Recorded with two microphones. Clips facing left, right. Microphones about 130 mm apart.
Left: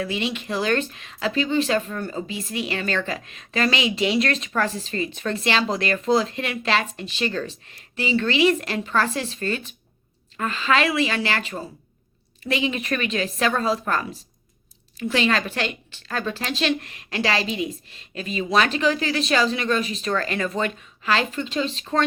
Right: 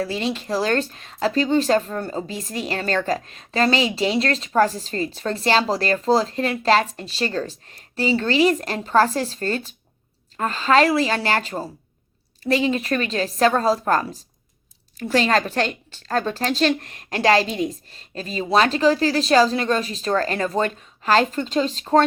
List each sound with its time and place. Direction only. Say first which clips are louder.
0.0 s speech: right 2 dB; 35° right (ahead or behind)